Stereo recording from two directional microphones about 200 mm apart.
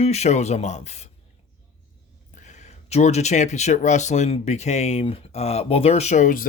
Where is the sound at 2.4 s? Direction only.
35° left (ahead or behind).